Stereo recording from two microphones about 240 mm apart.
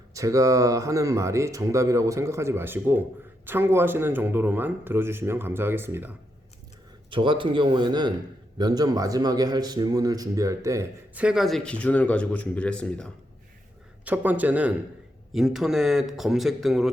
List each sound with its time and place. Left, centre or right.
0.1 s speech: centre
7.1 s a man's voice: right; by 13.1 s centre
14.0 s speech: centre